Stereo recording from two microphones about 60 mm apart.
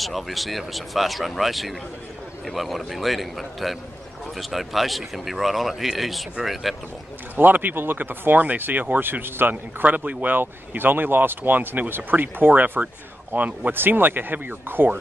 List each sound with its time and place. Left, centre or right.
0.0 s speech: centre
7.3 s speech: right